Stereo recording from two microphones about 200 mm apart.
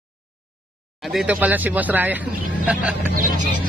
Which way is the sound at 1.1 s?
5° right (ahead or behind).